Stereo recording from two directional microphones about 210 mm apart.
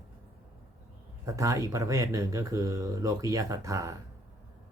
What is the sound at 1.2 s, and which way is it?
Speech, 15° right (ahead or behind).